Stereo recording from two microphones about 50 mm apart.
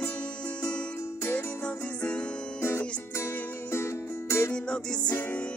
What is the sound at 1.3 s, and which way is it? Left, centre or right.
Music, left.